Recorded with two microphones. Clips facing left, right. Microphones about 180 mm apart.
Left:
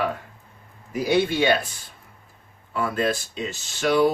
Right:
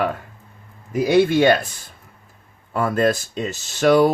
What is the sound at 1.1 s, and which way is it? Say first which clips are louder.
Speech: right 5 dB; 50° right (ahead or behind).